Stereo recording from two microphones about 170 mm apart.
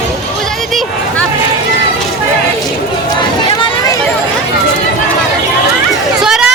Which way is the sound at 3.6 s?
30° left (ahead or behind).